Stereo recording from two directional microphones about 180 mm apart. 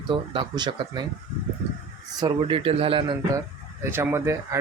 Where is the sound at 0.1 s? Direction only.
25° right (ahead or behind).